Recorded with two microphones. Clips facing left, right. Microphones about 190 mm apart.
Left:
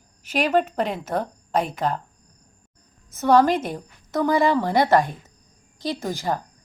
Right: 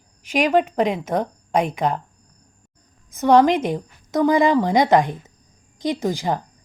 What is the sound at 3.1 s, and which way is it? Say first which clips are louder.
A woman's voice: right 3 dB; 15° right (ahead or behind).